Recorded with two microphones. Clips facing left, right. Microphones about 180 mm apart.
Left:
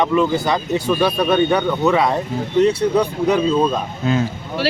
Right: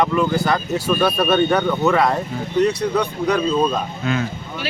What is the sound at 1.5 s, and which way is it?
Speech, 10° left (ahead or behind).